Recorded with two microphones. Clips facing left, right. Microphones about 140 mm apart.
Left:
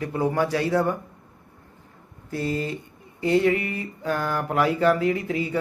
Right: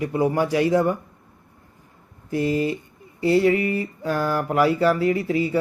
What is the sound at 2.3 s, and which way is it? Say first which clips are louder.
Speech: right 5 dB; 15° right (ahead or behind).